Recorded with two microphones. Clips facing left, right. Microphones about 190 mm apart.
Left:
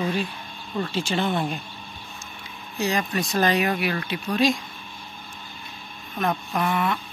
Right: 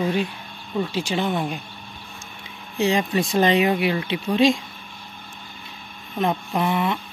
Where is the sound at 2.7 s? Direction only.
25° right (ahead or behind).